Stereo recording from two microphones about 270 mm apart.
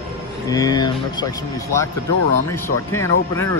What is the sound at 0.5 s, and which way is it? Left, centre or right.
Speech, centre.